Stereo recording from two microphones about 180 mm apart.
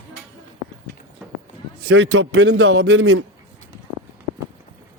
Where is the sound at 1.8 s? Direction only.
80° right.